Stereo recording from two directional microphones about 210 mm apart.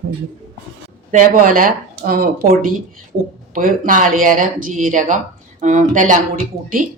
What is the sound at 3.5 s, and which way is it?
Speech, 40° right (ahead or behind).